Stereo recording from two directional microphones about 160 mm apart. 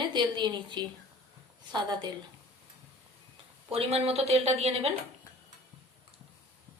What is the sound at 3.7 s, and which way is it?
A woman's voice, 40° right (ahead or behind).